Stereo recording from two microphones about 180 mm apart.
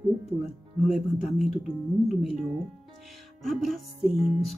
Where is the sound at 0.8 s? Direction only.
Centre (ahead or behind).